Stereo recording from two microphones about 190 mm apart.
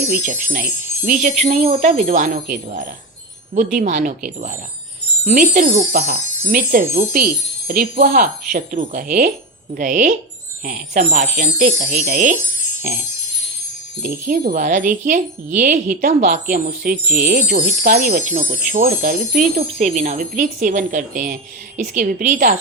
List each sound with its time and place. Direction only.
0.5 s speech: 50° right (ahead or behind); by 2.0 s 30° right (ahead or behind)
2.0 s speech: 45° right (ahead or behind)
5.2 s speech: 45° right (ahead or behind)
6.7 s speech: 50° right (ahead or behind)
14.3 s speech: 45° right (ahead or behind)
19.5 s speech: 35° right (ahead or behind)